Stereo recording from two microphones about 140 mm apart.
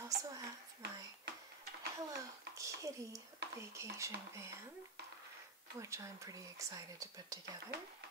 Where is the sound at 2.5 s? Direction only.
20° right (ahead or behind).